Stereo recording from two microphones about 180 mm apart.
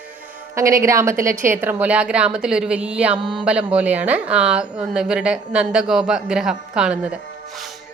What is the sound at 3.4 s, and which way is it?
Speech, 5° right (ahead or behind).